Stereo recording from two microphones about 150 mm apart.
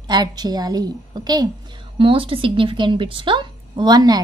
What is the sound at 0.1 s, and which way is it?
A woman's voice, 25° right (ahead or behind).